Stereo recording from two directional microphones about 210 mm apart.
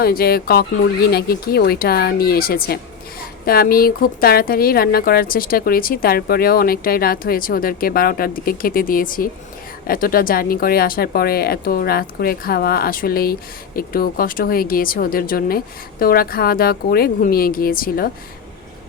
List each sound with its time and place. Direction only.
0.0 s speech: 45° left (ahead or behind)